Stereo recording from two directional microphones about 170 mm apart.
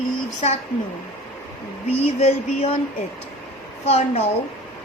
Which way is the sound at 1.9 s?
40° left (ahead or behind).